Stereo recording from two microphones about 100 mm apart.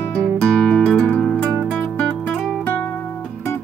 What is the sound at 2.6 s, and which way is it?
Music, 15° left (ahead or behind).